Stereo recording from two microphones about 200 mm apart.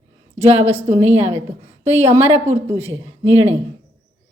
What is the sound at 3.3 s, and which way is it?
Speech, 30° right (ahead or behind).